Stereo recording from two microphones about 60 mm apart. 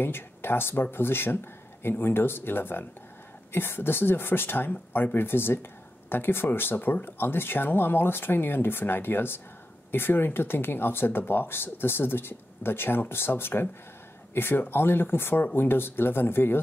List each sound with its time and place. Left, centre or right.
0.0 s speech: left